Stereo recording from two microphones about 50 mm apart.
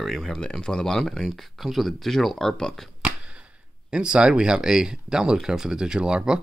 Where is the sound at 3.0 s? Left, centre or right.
Right.